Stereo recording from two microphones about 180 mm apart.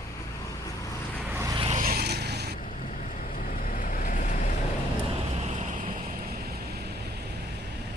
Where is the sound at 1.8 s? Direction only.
55° right (ahead or behind).